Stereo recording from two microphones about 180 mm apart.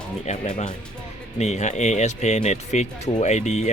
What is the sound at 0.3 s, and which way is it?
Speech, 45° left (ahead or behind).